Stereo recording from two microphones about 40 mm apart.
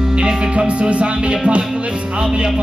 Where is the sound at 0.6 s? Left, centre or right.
Right.